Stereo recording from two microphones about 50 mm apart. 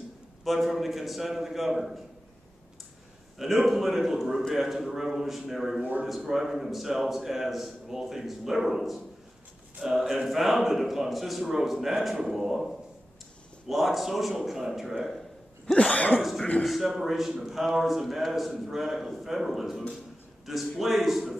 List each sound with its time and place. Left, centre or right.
0.4 s a man's voice: centre
3.3 s a man's voice: centre
15.6 s cough: centre
16.2 s a man's voice: centre